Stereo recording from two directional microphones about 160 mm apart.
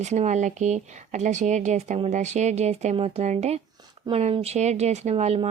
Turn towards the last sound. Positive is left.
turn(degrees=-40)  # may be behind; listen again after turning